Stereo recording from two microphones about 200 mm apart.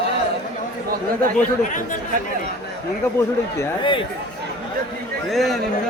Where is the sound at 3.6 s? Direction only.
25° left (ahead or behind).